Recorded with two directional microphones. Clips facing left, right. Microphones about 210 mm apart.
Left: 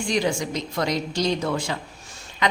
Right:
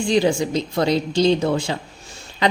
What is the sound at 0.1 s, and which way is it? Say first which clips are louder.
A woman's voice: right 6 dB; 30° right (ahead or behind).